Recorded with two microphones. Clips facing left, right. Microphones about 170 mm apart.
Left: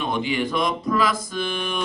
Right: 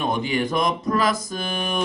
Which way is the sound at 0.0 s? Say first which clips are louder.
Right 1 dB; 45° right (ahead or behind).